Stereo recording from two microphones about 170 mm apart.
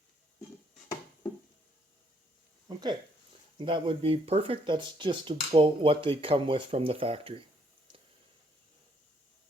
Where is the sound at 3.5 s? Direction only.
30° right (ahead or behind).